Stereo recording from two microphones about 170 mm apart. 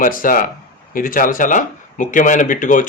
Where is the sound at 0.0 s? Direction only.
55° left (ahead or behind).